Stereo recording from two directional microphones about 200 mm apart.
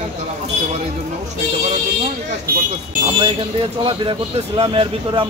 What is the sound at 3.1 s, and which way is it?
A man's voice, 25° right (ahead or behind).